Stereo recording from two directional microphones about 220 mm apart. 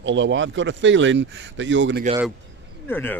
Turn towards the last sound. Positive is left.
turn(degrees=10)  # may be behind; listen again after turning